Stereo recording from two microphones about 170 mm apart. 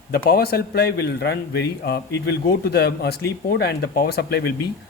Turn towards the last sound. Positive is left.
turn(degrees=70)  # may be behind; listen again after turning